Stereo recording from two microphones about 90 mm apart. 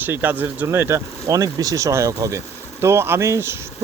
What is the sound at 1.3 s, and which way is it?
Speech, 40° right (ahead or behind).